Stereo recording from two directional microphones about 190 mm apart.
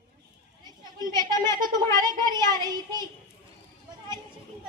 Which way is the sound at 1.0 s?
20° right (ahead or behind).